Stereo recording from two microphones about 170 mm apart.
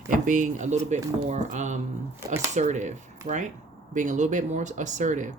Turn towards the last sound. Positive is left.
turn(degrees=-45)  # may be behind; listen again after turning